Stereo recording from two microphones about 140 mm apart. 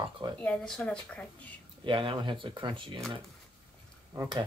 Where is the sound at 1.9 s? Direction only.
35° right (ahead or behind).